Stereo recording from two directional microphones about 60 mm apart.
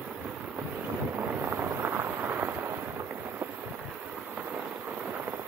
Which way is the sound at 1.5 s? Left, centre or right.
Right.